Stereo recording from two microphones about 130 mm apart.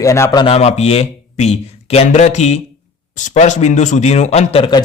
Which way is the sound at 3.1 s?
70° left (ahead or behind).